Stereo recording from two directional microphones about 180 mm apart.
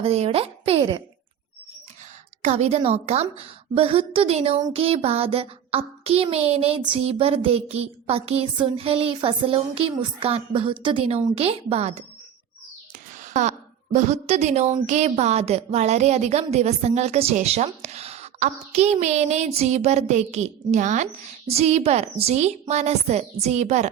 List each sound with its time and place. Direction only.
0.0 s a woman's voice: 35° right (ahead or behind)
2.4 s a woman's voice: 40° right (ahead or behind)
13.2 s a woman's voice: 40° right (ahead or behind)